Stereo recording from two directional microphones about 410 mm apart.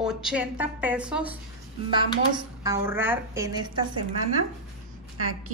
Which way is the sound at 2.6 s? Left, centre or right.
Centre.